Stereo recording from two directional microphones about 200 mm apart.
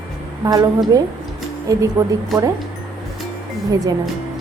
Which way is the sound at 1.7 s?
15° right (ahead or behind).